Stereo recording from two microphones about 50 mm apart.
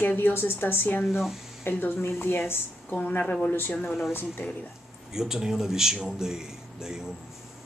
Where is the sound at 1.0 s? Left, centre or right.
Centre.